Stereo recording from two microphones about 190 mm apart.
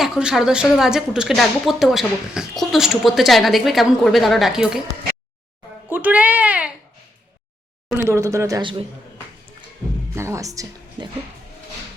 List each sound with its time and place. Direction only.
0.0 s speech: 5° right (ahead or behind)
5.9 s speech: 10° right (ahead or behind)
7.9 s speech: 15° right (ahead or behind)
9.8 s music: 10° left (ahead or behind)
10.2 s speech: 15° right (ahead or behind)